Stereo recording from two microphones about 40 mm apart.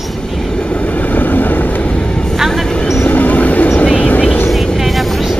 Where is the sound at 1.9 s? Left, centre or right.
Left.